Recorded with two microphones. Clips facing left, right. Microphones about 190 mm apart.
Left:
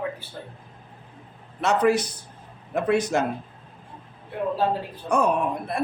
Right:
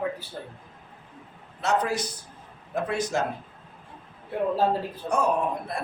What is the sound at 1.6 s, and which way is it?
A man's voice, 65° left (ahead or behind).